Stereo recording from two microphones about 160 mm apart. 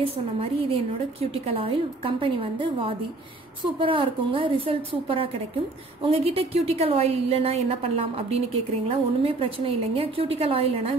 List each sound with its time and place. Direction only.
0.0 s a woman's voice: 35° right (ahead or behind)